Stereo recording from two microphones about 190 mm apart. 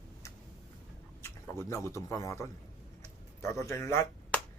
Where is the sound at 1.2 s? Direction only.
15° left (ahead or behind).